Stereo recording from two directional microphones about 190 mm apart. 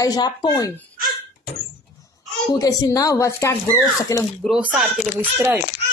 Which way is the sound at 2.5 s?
20° left (ahead or behind).